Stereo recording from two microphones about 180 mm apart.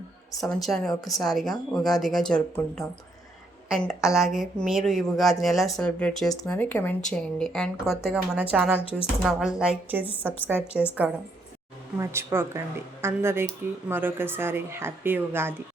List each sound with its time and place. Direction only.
0.3 s speech: centre (ahead or behind)
8.8 s a woman's voice: 30° left (ahead or behind)
9.2 s speech: 5° right (ahead or behind)
11.9 s a woman's voice: 15° right (ahead or behind)